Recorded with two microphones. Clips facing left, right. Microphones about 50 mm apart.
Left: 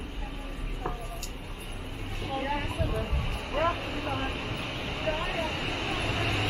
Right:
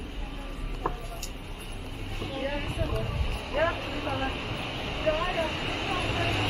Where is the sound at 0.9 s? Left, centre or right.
Right.